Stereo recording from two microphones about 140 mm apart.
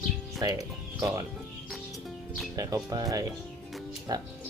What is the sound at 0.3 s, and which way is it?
Speech, 25° right (ahead or behind).